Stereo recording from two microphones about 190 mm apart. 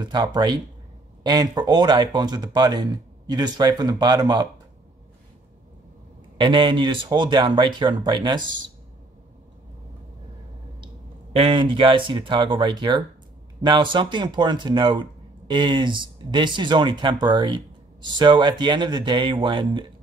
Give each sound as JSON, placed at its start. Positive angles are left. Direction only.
{"t": 0.0, "sound": "speech", "side_deg": -20}
{"t": 6.3, "sound": "speech", "side_deg": -25}
{"t": 11.3, "sound": "speech", "side_deg": -25}